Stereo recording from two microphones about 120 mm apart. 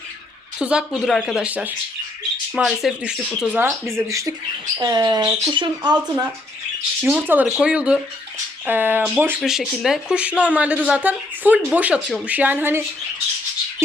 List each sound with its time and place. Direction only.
0.6 s a woman's voice: 10° right (ahead or behind)
3.6 s speech: 20° right (ahead or behind)
7.0 s a woman's voice: 15° right (ahead or behind)
9.4 s a woman's voice: 5° right (ahead or behind)